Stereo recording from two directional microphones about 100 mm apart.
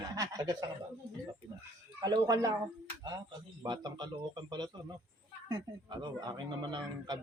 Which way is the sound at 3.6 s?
45° right (ahead or behind).